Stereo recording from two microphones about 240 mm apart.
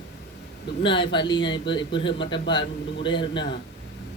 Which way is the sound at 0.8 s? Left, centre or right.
Left.